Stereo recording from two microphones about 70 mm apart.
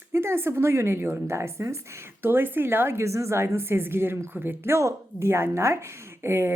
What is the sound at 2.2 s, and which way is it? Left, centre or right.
A woman's voice, right.